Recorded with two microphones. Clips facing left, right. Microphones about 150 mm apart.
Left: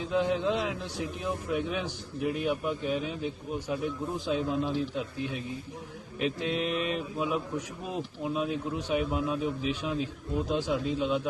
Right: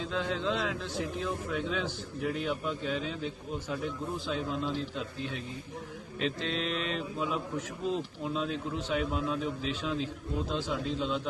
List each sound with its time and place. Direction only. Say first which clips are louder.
0.0 s a man's voice: left 5 dB; 15° left (ahead or behind)